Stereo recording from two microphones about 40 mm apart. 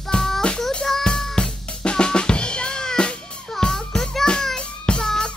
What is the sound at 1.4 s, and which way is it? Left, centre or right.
Drum, left.